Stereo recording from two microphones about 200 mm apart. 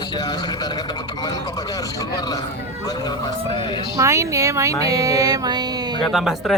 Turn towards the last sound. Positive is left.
turn(degrees=0)  # may be behind; listen again after turning